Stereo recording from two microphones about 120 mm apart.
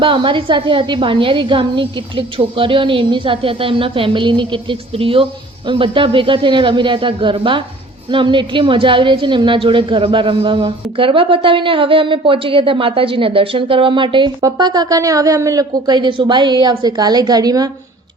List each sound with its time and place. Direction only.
0.0 s a woman's voice: 45° right (ahead or behind)